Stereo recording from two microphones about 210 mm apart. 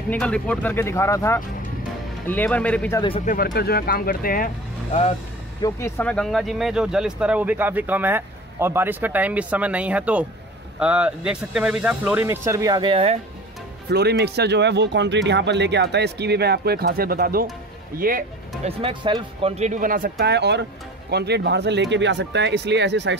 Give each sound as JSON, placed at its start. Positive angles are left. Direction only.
{"t": 0.1, "sound": "speech", "side_deg": 5}
{"t": 3.0, "sound": "speech", "side_deg": 25}
{"t": 3.3, "sound": "speech", "side_deg": 40}
{"t": 5.6, "sound": "speech", "side_deg": 10}
{"t": 13.8, "sound": "speech", "side_deg": -50}
{"t": 18.6, "sound": "speech", "side_deg": -25}